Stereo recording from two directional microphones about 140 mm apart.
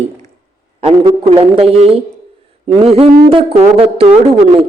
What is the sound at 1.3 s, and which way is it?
Speech, 45° right (ahead or behind).